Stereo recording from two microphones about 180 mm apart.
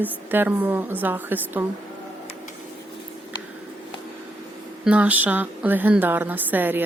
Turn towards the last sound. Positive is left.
turn(degrees=-10)  # may be behind; listen again after turning